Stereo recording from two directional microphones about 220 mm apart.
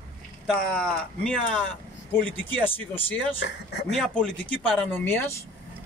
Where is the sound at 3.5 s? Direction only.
50° left (ahead or behind).